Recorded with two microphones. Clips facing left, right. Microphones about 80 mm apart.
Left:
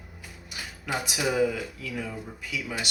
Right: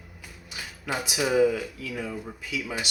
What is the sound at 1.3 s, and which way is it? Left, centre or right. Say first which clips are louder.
Speech: right 7 dB; centre.